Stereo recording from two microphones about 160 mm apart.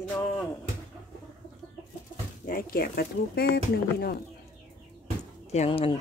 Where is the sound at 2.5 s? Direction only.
65° left (ahead or behind).